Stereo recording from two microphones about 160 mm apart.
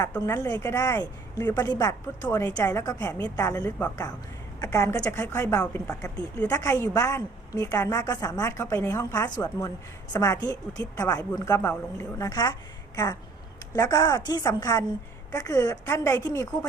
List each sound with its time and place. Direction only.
0.3 s a woman's voice: 20° left (ahead or behind)
13.7 s a woman's voice: 25° left (ahead or behind)